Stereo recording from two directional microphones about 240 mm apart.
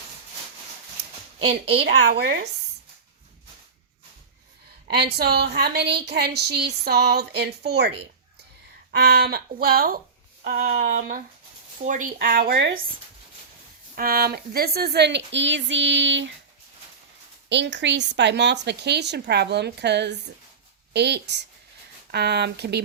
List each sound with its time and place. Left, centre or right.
1.5 s a woman's voice: right
1.8 s speech: right
4.9 s speech: right
9.0 s speech: right
13.9 s speech: right
17.5 s speech: right